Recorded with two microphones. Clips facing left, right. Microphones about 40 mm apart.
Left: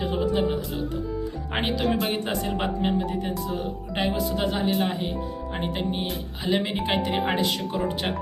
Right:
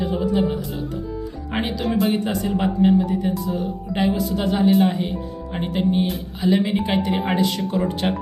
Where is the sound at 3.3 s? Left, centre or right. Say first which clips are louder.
Right 4 dB; centre.